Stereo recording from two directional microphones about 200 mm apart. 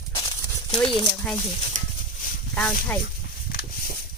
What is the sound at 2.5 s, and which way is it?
Speech, 5° left (ahead or behind).